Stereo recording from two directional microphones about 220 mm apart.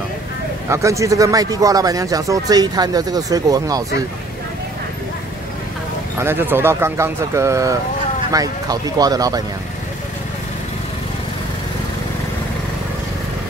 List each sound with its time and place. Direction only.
0.7 s a man's voice: 15° right (ahead or behind)
6.1 s a man's voice: 10° right (ahead or behind)